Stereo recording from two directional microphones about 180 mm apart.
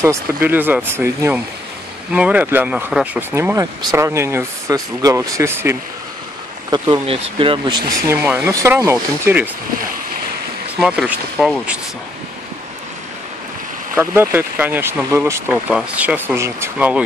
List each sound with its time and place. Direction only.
0.0 s speech: 15° right (ahead or behind)
6.7 s speech: 25° right (ahead or behind)
8.1 s speech: 10° right (ahead or behind)
10.8 s speech: 5° right (ahead or behind)
13.9 s speech: 10° right (ahead or behind)